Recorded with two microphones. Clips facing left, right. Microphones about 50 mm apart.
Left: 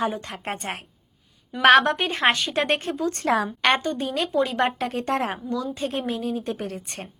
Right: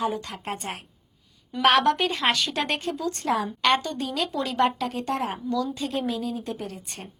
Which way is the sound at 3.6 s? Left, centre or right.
Left.